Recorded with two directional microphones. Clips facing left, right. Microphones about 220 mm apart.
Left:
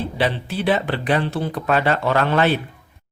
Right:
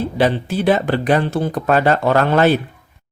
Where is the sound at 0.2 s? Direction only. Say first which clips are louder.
Right 6 dB; 45° right (ahead or behind).